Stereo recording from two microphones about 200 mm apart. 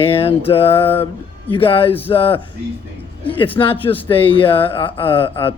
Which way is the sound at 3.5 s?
25° left (ahead or behind).